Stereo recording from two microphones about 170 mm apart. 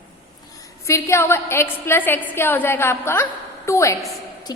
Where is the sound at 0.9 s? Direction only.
15° left (ahead or behind).